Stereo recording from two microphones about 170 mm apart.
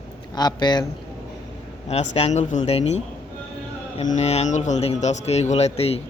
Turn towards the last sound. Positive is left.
turn(degrees=35)  # may be behind; listen again after turning